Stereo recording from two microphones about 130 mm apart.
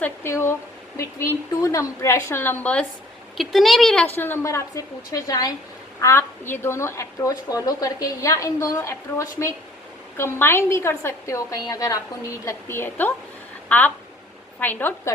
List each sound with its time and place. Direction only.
0.0 s a woman's voice: 20° left (ahead or behind)
3.3 s speech: centre (ahead or behind)
4.1 s a woman's voice: 15° left (ahead or behind)